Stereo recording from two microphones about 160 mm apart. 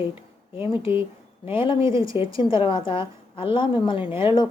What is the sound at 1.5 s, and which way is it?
A woman's voice, 30° left (ahead or behind).